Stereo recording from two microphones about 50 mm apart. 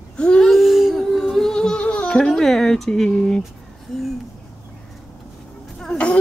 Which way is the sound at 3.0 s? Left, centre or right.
Centre.